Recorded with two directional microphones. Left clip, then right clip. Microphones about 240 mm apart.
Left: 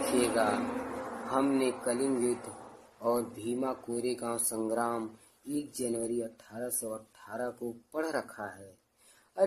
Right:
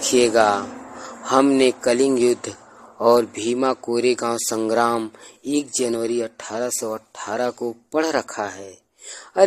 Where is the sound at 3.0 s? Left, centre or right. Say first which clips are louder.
Right 15 dB; right.